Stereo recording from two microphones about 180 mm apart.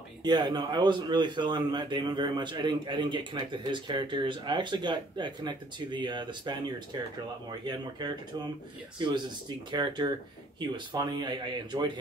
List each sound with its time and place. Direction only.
0.2 s a man's voice: 25° right (ahead or behind)